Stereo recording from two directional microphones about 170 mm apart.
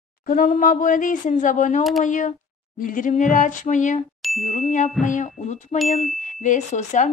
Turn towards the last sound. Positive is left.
turn(degrees=45)  # may be behind; listen again after turning